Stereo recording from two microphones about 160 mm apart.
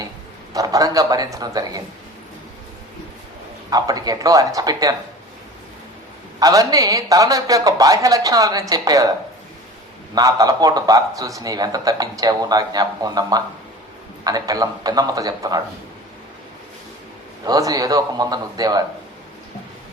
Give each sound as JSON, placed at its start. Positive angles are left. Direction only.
{"t": 0.5, "sound": "a man's voice", "side_deg": -20}
{"t": 3.7, "sound": "a man's voice", "side_deg": -25}
{"t": 6.4, "sound": "a man's voice", "side_deg": -20}
{"t": 10.2, "sound": "a man's voice", "side_deg": -20}
{"t": 17.4, "sound": "a man's voice", "side_deg": -20}